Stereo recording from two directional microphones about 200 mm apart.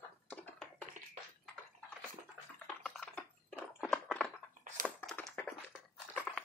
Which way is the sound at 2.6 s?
5° left (ahead or behind).